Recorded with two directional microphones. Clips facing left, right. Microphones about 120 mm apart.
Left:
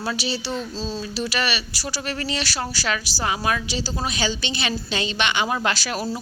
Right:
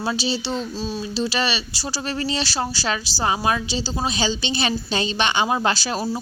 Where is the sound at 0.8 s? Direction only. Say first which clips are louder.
Right 1 dB; 15° right (ahead or behind).